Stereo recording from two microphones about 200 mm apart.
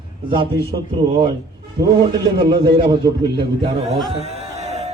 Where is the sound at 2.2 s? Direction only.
25° right (ahead or behind).